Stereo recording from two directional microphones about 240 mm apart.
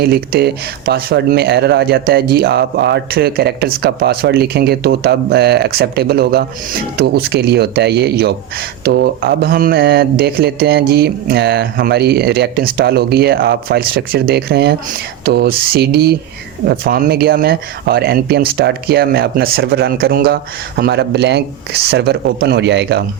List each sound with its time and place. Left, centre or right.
0.0 s speech: right